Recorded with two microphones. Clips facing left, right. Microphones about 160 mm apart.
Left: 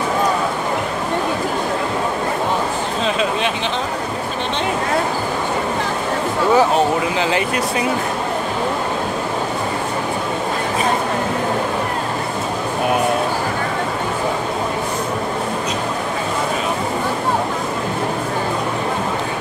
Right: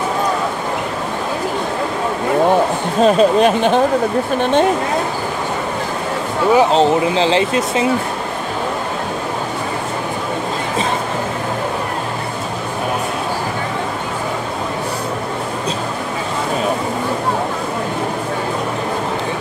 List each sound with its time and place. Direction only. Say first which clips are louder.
3.0 s speech: right 10 dB; 45° right (ahead or behind)
6.5 s speech: right 3 dB; 25° right (ahead or behind)